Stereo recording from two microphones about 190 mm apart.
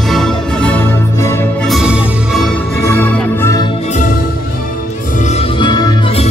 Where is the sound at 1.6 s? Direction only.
5° right (ahead or behind); by 3.7 s 15° left (ahead or behind).